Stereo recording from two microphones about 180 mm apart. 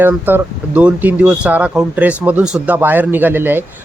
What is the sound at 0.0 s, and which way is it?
Speech, 10° right (ahead or behind).